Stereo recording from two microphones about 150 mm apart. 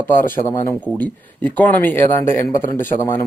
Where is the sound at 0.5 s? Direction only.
10° left (ahead or behind).